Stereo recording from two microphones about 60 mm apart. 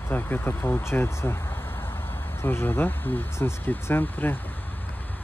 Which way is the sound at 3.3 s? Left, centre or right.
Left.